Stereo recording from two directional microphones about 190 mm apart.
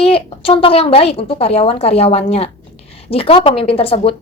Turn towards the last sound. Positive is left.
turn(degrees=30)  # may be behind; listen again after turning